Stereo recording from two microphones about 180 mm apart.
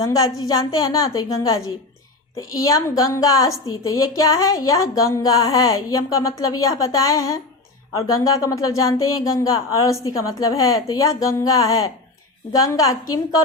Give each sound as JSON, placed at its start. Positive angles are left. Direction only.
{"t": 0.0, "sound": "a woman's voice", "side_deg": 20}